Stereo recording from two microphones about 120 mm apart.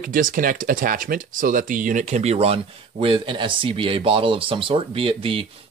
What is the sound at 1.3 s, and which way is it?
Speech, 90° right.